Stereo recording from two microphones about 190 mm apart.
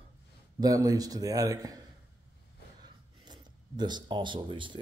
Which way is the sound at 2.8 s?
25° right (ahead or behind).